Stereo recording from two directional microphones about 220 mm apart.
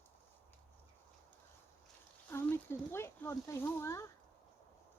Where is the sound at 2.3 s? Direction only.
10° left (ahead or behind).